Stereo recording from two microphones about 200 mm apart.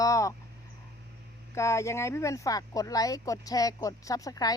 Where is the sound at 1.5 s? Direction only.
15° left (ahead or behind).